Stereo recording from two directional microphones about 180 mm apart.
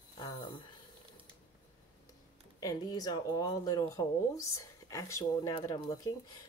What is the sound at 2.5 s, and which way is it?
Speech, 20° left (ahead or behind).